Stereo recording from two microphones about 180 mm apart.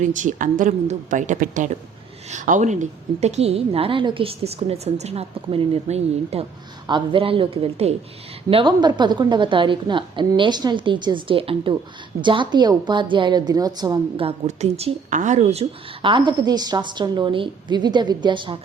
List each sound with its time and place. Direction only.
0.0 s a woman's voice: 45° right (ahead or behind); by 18.6 s 25° right (ahead or behind)